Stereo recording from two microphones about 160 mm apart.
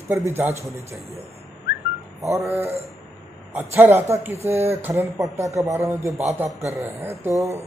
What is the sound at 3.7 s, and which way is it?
Speech, 15° right (ahead or behind).